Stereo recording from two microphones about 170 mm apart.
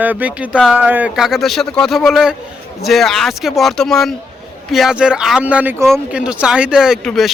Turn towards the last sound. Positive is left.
turn(degrees=0)  # may be behind; listen again after turning